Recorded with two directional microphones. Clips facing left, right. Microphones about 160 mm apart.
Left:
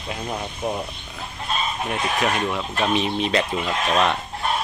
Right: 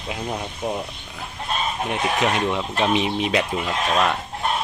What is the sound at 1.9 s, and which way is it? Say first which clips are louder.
Speech: right 2 dB; 20° right (ahead or behind).